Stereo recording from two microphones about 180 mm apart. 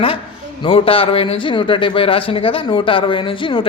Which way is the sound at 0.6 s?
30° left (ahead or behind).